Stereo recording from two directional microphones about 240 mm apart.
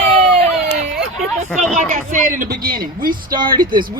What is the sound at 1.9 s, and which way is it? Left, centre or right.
Speech, right.